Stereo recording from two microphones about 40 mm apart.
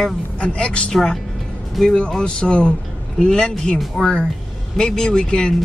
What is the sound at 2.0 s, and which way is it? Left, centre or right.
Speech, centre.